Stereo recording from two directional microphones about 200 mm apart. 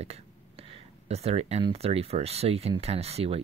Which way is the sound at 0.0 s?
30° right (ahead or behind).